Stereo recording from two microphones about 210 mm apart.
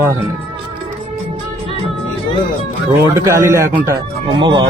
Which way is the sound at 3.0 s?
15° right (ahead or behind).